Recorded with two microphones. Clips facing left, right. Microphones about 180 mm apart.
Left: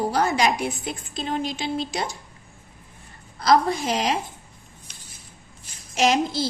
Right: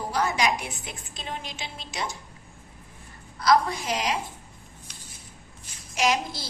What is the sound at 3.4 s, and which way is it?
Speech, 30° left (ahead or behind).